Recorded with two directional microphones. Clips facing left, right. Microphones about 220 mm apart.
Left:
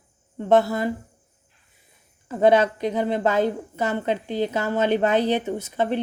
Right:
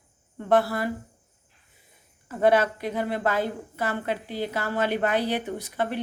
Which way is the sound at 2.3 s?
25° left (ahead or behind).